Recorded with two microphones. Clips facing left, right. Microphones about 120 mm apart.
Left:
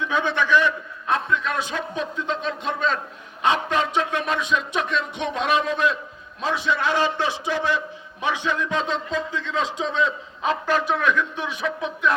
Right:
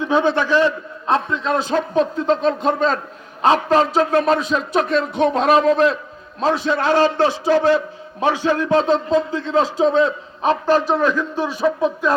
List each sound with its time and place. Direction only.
0.0 s a man's voice: 35° right (ahead or behind)